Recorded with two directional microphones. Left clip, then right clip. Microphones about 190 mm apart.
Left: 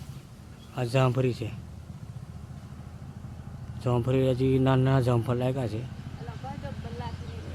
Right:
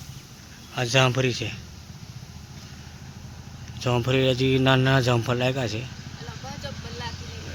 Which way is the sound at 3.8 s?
Centre (ahead or behind).